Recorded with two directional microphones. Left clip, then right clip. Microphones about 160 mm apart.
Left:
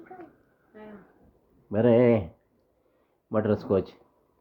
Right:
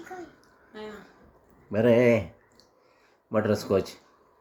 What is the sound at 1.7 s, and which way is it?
Speech, 20° left (ahead or behind).